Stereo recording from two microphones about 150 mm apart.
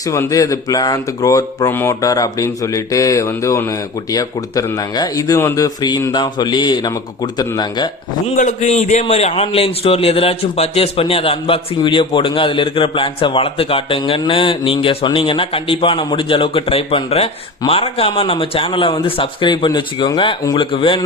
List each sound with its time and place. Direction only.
0.0 s speech: 20° left (ahead or behind)
8.4 s a man's voice: 50° left (ahead or behind); by 21.0 s 35° left (ahead or behind)